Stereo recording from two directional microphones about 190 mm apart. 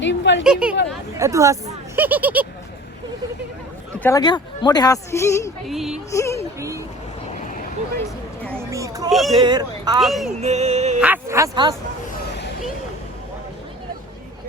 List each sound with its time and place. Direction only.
0.0 s a sound: 70° left (ahead or behind)
0.4 s speech: 5° right (ahead or behind)
1.1 s speech: 15° right (ahead or behind)
4.0 s a woman's voice: 20° left (ahead or behind)
5.6 s speech: centre (ahead or behind)
6.1 s a woman's voice: 15° left (ahead or behind)
6.6 s speech: 15° right (ahead or behind)
8.5 s a sound: 15° right (ahead or behind)
9.0 s speech: centre (ahead or behind)
9.4 s speech: 20° right (ahead or behind)
10.0 s speech: centre (ahead or behind)
10.4 s music: 35° right (ahead or behind)
11.0 s speech: 10° right (ahead or behind)